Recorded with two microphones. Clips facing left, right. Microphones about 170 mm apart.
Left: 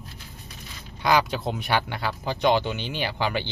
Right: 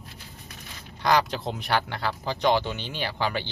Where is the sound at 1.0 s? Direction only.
5° left (ahead or behind).